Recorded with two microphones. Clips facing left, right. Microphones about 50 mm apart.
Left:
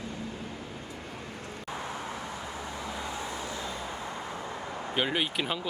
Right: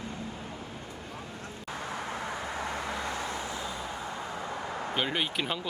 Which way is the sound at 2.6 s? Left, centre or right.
Right.